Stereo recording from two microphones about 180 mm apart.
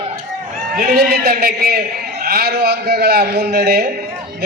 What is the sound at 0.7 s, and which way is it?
A man's voice, 55° right (ahead or behind).